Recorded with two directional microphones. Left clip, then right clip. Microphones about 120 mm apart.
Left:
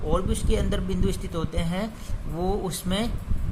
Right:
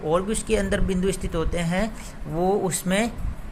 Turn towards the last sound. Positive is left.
turn(degrees=-20)  # may be behind; listen again after turning